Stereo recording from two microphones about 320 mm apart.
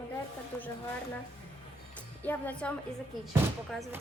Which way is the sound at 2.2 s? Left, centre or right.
Centre.